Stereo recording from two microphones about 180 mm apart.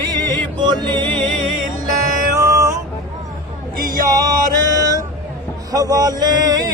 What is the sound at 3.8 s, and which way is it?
Music, 50° right (ahead or behind).